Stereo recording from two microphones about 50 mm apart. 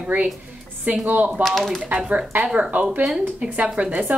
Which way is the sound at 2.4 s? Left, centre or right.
Right.